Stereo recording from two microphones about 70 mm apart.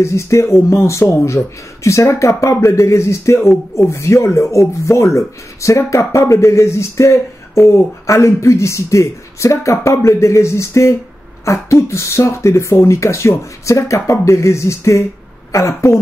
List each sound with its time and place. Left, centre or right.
0.0 s speech: left